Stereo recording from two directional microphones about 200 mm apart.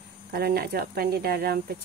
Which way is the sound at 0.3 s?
50° right (ahead or behind).